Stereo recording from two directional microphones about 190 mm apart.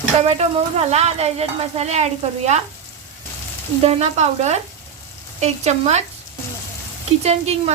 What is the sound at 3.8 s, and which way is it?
Speech, 35° right (ahead or behind).